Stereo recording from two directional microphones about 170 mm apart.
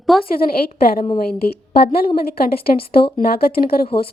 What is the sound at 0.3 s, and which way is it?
A woman's voice, 60° left (ahead or behind).